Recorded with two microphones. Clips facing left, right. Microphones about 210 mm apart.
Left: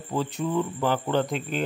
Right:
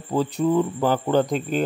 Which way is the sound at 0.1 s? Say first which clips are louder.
Right 6 dB; 40° right (ahead or behind).